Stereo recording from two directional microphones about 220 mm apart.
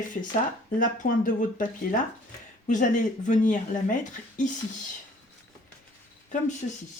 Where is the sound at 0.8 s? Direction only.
40° left (ahead or behind).